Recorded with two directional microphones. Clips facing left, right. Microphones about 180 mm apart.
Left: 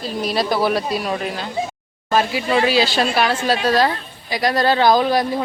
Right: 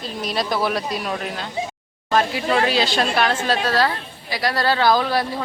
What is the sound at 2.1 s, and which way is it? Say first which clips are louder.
Speech: left 1 dB; 5° left (ahead or behind).